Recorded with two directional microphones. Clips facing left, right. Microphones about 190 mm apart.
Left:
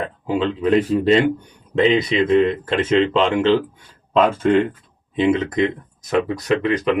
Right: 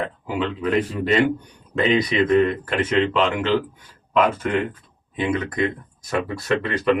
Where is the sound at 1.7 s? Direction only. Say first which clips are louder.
Left 3 dB; 25° left (ahead or behind).